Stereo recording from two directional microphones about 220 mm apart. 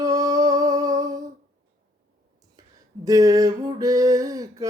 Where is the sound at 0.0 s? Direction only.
15° right (ahead or behind).